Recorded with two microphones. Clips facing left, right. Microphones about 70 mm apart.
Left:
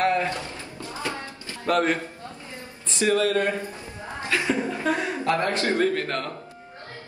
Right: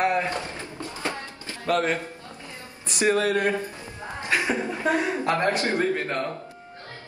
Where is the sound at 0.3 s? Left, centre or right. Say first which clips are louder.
Right 1 dB; right.